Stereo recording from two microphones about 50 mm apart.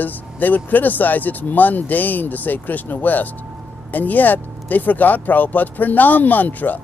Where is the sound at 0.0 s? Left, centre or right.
Left.